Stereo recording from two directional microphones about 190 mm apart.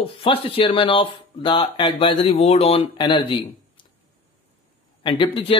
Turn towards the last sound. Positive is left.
turn(degrees=30)  # may be behind; listen again after turning